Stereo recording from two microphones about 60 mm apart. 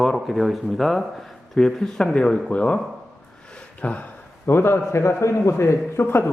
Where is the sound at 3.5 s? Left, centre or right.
Left.